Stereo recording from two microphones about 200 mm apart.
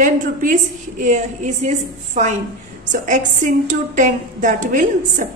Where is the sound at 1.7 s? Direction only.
35° right (ahead or behind).